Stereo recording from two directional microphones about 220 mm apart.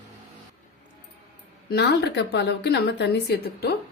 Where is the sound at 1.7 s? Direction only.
50° left (ahead or behind).